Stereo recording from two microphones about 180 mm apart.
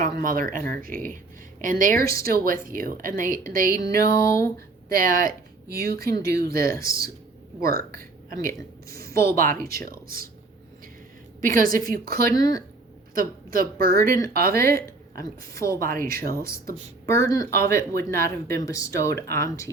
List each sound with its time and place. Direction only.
0.0 s a woman's voice: 50° right (ahead or behind)
3.8 s speech: 15° left (ahead or behind)
4.9 s speech: 50° right (ahead or behind)
6.1 s speech: 15° left (ahead or behind)
6.4 s speech: 55° right (ahead or behind)
9.0 s speech: 15° left (ahead or behind)
9.3 s a woman's voice: 50° right (ahead or behind)
11.4 s a woman's voice: 50° right (ahead or behind)
12.3 s speech: 20° left (ahead or behind)
13.1 s a woman's voice: 50° right (ahead or behind)
14.5 s speech: 15° left (ahead or behind)
14.8 s a woman's voice: 55° right (ahead or behind)
15.5 s speech: 15° left (ahead or behind)